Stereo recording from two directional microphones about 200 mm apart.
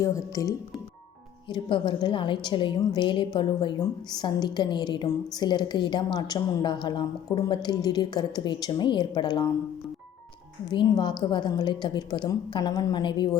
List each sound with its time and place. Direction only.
0.0 s a woman's voice: 15° left (ahead or behind)
10.7 s a woman's voice: 20° left (ahead or behind)